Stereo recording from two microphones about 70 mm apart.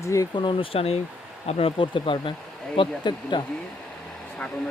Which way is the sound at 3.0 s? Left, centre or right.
Left.